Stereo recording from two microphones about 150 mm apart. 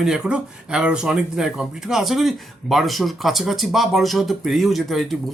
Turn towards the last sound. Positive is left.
turn(degrees=0)  # may be behind; listen again after turning